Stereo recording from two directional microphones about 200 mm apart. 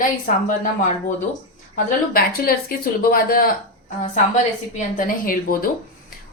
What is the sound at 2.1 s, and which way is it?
A woman's voice, 50° left (ahead or behind).